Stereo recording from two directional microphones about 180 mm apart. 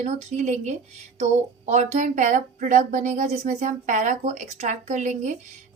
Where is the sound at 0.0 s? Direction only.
40° right (ahead or behind).